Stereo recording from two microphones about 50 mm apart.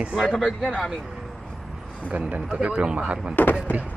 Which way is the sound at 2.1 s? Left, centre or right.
Right.